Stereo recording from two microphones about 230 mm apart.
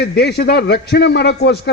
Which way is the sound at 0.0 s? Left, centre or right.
Left.